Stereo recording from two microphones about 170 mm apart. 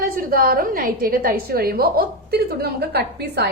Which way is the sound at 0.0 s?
60° right (ahead or behind).